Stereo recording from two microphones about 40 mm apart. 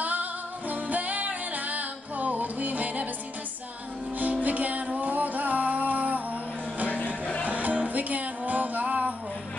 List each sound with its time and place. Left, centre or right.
0.0 s music: right
4.2 s music: right
7.4 s music: right